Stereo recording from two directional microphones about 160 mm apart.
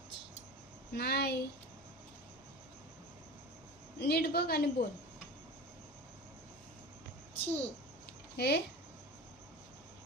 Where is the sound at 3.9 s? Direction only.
80° left.